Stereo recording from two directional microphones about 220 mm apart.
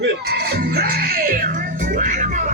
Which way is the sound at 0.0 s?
45° right (ahead or behind).